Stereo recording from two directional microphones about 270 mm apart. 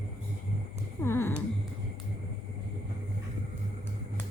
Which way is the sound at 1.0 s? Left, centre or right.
Centre.